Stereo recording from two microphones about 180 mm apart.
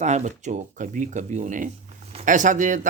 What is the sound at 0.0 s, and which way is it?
Speech, 40° right (ahead or behind).